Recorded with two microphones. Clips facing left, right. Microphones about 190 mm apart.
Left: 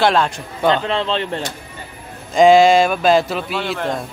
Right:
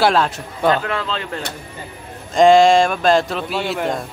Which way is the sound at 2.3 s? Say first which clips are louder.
Left 1 dB; centre (ahead or behind).